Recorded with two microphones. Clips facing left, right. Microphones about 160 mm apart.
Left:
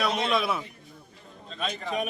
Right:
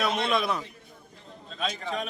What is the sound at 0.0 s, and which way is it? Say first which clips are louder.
Speech: even; centre (ahead or behind).